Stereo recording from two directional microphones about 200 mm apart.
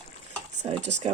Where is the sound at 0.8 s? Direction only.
35° right (ahead or behind).